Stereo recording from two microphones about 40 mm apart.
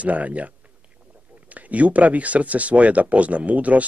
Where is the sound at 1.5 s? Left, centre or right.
Right.